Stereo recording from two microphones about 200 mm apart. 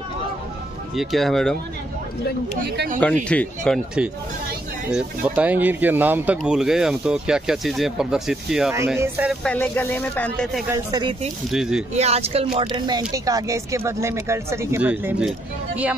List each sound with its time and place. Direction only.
0.9 s speech: centre (ahead or behind)
3.3 s speech: 5° left (ahead or behind)
9.4 s speech: 10° left (ahead or behind)
10.7 s speech: 20° right (ahead or behind)
11.5 s speech: 5° right (ahead or behind)
11.9 s speech: 30° right (ahead or behind); by 15.3 s 5° right (ahead or behind)